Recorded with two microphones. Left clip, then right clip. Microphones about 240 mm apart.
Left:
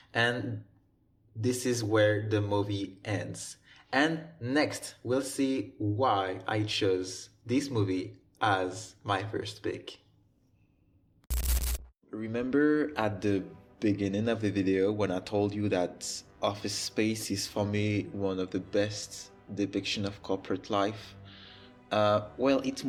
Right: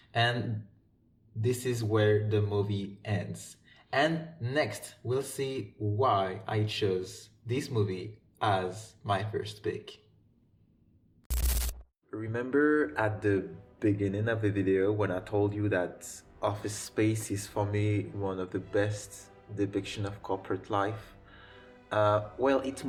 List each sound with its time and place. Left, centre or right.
0.1 s a man's voice: left
1.4 s a man's voice: left
11.3 s a sound: centre
12.1 s speech: left